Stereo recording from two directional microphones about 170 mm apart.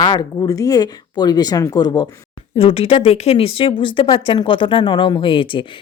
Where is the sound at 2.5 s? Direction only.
35° left (ahead or behind).